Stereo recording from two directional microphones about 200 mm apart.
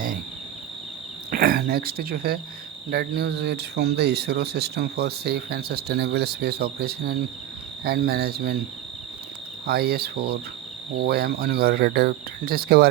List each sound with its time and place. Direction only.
1.3 s speech: 45° right (ahead or behind)
9.6 s speech: 50° right (ahead or behind)